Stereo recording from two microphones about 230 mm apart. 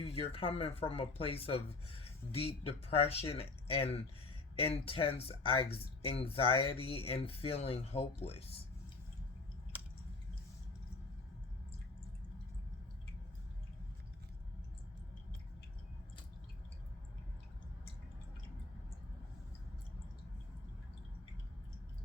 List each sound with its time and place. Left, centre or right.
0.0 s speech: left